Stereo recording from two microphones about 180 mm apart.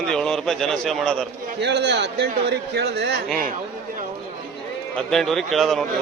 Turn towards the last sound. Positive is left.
turn(degrees=0)  # may be behind; listen again after turning